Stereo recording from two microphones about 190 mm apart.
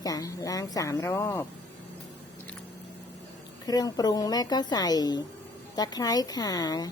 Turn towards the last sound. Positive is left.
turn(degrees=20)  # may be behind; listen again after turning